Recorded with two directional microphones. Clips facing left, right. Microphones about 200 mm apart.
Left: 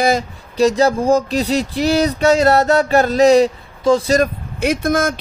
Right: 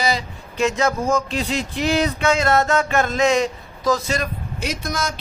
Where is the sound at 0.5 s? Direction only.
35° left (ahead or behind).